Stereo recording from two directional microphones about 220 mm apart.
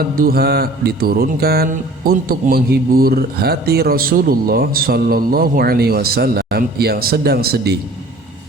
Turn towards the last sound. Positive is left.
turn(degrees=-45)  # may be behind; listen again after turning